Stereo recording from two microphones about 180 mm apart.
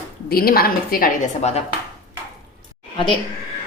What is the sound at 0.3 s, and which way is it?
Speech, 55° left (ahead or behind).